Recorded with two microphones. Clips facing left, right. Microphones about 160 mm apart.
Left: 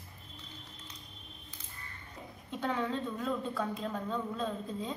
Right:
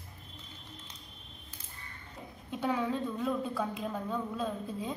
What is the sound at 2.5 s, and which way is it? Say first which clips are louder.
A woman's voice: right 2 dB; 10° right (ahead or behind).